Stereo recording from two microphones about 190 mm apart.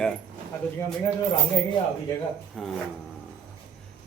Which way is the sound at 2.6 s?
Centre (ahead or behind).